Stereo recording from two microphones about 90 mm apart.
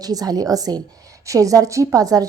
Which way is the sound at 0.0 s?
45° right (ahead or behind).